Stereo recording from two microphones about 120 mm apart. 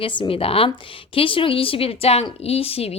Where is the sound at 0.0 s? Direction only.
45° left (ahead or behind).